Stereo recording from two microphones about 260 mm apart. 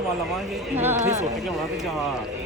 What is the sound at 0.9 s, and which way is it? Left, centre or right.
Speech, right.